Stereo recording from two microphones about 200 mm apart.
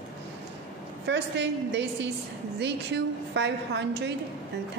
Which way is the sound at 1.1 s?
60° right (ahead or behind).